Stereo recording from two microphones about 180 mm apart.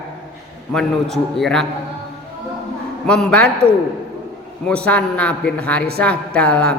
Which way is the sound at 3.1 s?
5° left (ahead or behind).